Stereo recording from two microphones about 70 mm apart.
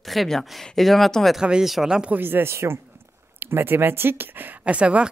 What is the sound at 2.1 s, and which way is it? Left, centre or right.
A woman's voice, right.